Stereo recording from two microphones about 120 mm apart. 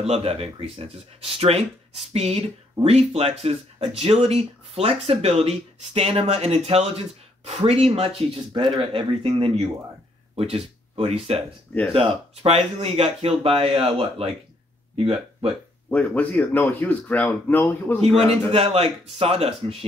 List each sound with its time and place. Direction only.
0.0 s speech: 60° right (ahead or behind)
15.9 s speech: 15° left (ahead or behind)
18.5 s speech: 55° right (ahead or behind)